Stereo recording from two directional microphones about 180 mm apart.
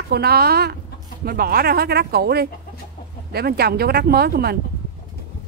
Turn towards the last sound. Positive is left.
turn(degrees=-60)  # may be behind; listen again after turning